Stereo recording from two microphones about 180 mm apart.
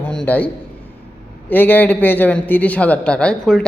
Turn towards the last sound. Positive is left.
turn(degrees=5)  # may be behind; listen again after turning